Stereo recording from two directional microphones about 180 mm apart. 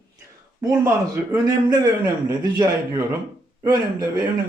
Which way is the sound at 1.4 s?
20° right (ahead or behind).